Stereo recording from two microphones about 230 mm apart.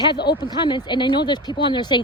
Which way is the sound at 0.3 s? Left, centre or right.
Centre.